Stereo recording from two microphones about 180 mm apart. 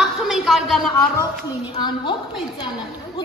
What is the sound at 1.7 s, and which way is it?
Speech, 25° left (ahead or behind).